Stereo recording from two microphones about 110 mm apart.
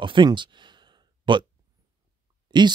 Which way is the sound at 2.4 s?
40° right (ahead or behind).